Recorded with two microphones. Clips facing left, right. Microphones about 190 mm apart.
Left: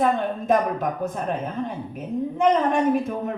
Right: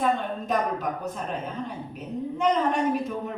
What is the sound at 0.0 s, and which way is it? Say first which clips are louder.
Speech: left 4 dB; 50° left (ahead or behind).